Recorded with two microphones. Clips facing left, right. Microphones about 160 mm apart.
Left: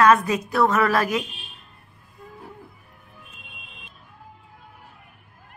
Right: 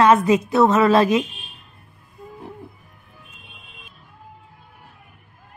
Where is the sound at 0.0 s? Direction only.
25° right (ahead or behind).